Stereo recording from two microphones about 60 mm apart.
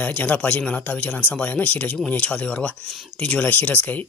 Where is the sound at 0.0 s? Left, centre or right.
Left.